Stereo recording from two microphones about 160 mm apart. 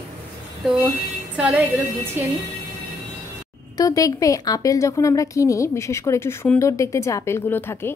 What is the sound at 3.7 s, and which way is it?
A woman's voice, 20° left (ahead or behind).